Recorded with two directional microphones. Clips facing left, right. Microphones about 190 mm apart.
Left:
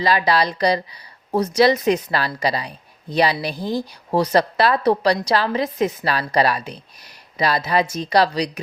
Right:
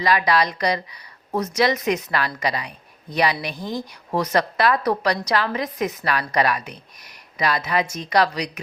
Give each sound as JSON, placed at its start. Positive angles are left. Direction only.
{"t": 0.0, "sound": "a woman's voice", "side_deg": 30}